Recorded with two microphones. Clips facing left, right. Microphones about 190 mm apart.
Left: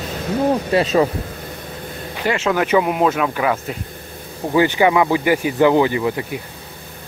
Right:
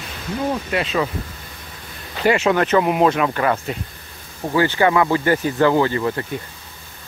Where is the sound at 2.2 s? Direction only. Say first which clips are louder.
Right 3 dB; 10° right (ahead or behind).